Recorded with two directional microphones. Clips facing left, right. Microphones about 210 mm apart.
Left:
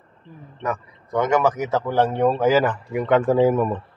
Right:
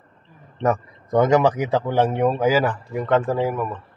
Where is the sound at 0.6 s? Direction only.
40° right (ahead or behind); by 2.2 s 20° right (ahead or behind).